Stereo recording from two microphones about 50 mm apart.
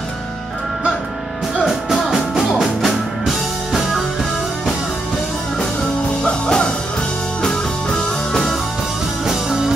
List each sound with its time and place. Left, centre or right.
1.7 s music: centre
6.2 s music: centre
8.3 s music: centre
9.2 s music: centre